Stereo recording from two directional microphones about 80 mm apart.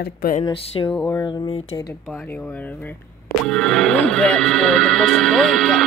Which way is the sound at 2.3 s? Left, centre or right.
Centre.